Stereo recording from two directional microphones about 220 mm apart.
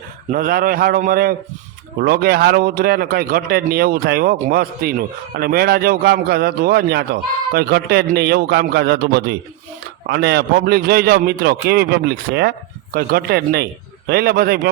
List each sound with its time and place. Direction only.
0.3 s a man's voice: 40° right (ahead or behind)